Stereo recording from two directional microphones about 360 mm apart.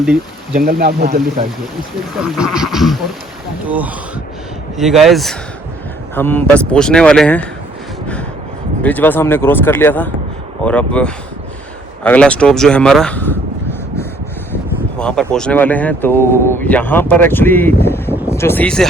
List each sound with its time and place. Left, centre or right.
0.5 s speech: right
2.1 s speech: centre
8.8 s speech: centre
14.9 s speech: centre